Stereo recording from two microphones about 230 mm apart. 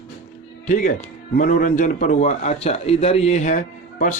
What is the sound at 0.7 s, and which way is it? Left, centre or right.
A man's voice, left.